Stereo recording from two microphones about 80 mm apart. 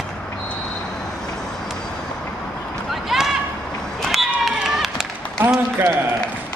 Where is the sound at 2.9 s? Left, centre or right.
Centre.